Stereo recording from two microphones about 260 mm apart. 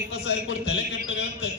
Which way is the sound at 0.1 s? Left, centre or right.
Left.